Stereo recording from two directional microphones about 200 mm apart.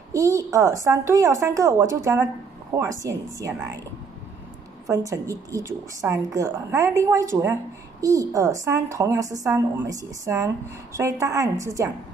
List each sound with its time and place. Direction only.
0.1 s a woman's voice: 15° right (ahead or behind)
4.8 s a woman's voice: 15° right (ahead or behind)